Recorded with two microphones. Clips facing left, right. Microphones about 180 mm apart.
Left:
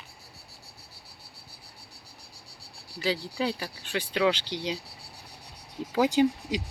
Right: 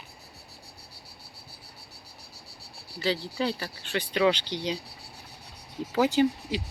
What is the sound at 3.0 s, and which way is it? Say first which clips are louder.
Speech: right 1 dB; 10° left (ahead or behind).